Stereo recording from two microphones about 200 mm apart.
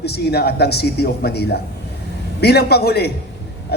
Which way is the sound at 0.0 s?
55° left (ahead or behind).